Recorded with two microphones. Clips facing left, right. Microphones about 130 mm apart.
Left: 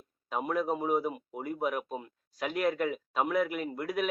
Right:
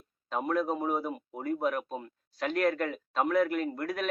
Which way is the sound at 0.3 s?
5° left (ahead or behind).